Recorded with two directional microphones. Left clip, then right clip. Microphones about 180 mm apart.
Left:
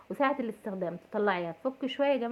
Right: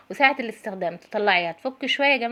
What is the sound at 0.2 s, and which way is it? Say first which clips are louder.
A woman's voice: right 9 dB; 15° right (ahead or behind).